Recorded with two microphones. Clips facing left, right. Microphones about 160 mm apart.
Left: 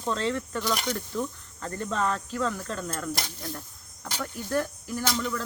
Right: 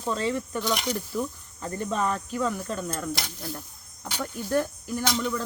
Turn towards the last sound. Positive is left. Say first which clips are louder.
# right 2 dB
turn(degrees=0)  # may be behind; listen again after turning